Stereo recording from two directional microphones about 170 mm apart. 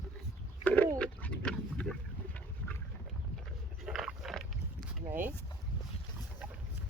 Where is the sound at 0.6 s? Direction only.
10° left (ahead or behind).